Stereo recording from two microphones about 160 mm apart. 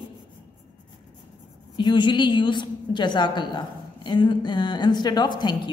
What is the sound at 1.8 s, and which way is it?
A woman's voice, 30° left (ahead or behind).